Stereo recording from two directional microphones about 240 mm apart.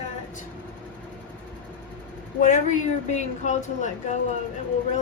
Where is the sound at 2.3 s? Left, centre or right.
Left.